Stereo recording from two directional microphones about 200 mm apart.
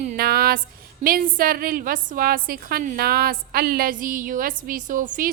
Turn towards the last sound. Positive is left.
turn(degrees=-40)  # may be behind; listen again after turning